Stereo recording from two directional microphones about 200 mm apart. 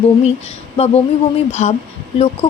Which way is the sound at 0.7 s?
30° left (ahead or behind).